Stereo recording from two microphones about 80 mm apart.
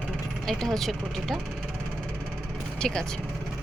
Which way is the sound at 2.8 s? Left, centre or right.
Centre.